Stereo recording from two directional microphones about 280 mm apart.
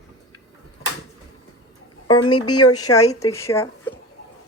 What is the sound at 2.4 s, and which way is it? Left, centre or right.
Speech, left.